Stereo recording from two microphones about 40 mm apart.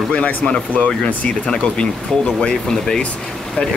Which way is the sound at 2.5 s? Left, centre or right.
Centre.